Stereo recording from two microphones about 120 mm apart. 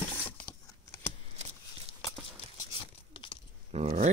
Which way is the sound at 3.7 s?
65° right (ahead or behind).